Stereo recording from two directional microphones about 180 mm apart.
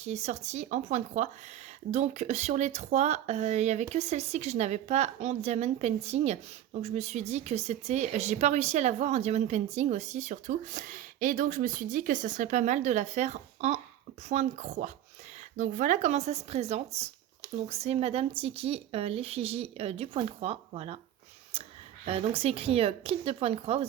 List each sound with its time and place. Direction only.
0.0 s speech: 40° right (ahead or behind)
22.0 s speech: 30° right (ahead or behind)